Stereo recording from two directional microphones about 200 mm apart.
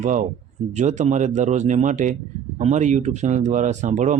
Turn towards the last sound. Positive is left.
turn(degrees=-35)  # may be behind; listen again after turning